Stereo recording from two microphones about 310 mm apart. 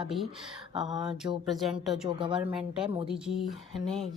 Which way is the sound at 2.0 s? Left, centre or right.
Centre.